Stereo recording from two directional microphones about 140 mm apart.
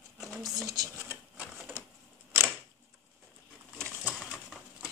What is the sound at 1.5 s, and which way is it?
Printer, 10° right (ahead or behind).